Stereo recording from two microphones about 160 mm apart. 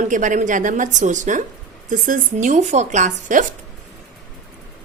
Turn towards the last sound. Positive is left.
turn(degrees=-50)  # may be behind; listen again after turning